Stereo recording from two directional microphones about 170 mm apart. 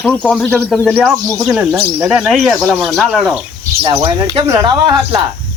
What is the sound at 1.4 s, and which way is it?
Speech, 5° right (ahead or behind).